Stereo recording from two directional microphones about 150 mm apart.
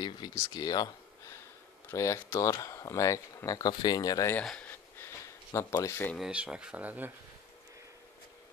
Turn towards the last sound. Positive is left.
turn(degrees=-10)  # may be behind; listen again after turning